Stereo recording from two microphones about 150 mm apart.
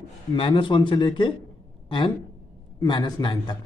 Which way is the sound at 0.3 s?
35° left (ahead or behind).